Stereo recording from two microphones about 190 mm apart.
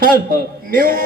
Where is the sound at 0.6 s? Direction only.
50° right (ahead or behind).